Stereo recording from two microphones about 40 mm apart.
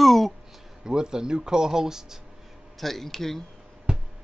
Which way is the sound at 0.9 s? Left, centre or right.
Centre.